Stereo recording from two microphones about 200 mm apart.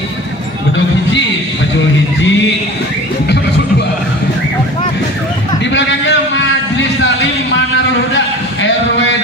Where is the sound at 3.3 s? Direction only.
55° left (ahead or behind).